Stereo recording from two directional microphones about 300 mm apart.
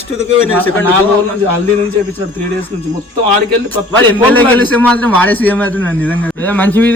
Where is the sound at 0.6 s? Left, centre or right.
Centre.